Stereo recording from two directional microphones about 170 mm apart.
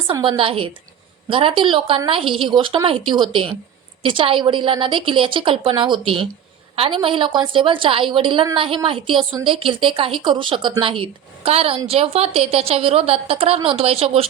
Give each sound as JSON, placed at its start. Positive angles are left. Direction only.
{"t": 0.1, "sound": "a woman's voice", "side_deg": -30}